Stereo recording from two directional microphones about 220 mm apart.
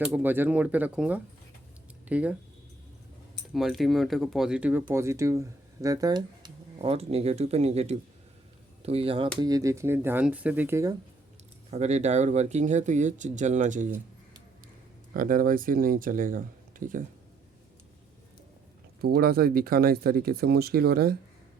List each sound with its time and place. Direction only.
0.0 s speech: 10° right (ahead or behind)
3.5 s speech: centre (ahead or behind)
11.7 s speech: 30° right (ahead or behind)
15.1 s speech: 40° right (ahead or behind)
19.0 s speech: 45° right (ahead or behind)